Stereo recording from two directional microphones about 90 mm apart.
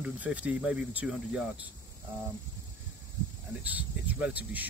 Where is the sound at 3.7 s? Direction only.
15° right (ahead or behind).